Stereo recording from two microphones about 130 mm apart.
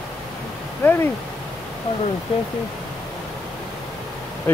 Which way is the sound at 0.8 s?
15° left (ahead or behind).